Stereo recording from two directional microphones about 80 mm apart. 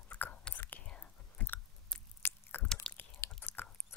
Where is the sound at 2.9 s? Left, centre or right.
Centre.